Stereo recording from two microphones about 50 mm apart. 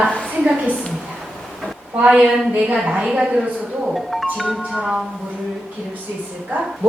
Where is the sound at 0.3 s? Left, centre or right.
Right.